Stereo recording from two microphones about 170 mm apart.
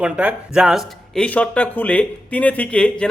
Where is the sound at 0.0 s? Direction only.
5° right (ahead or behind).